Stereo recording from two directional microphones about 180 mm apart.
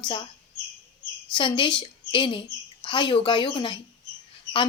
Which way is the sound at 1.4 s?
25° left (ahead or behind).